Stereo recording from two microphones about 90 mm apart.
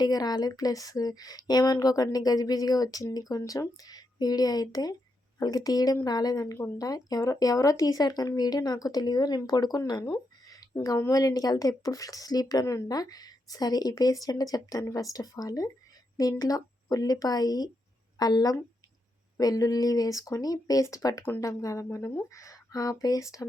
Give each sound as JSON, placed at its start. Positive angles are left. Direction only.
{"t": 0.0, "sound": "speech", "side_deg": 50}
{"t": 10.7, "sound": "speech", "side_deg": 30}
{"t": 11.1, "sound": "speech", "side_deg": 45}